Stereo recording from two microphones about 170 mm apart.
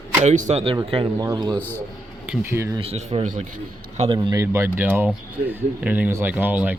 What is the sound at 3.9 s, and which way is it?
Speech, 30° right (ahead or behind).